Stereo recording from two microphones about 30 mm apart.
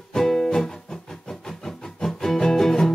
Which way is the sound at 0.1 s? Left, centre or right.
Centre.